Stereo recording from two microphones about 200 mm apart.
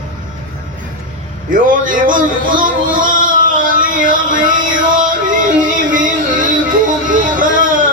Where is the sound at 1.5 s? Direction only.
40° right (ahead or behind).